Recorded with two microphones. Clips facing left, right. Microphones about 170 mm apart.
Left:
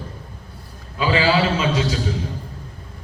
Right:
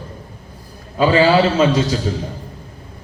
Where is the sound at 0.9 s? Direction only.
40° right (ahead or behind).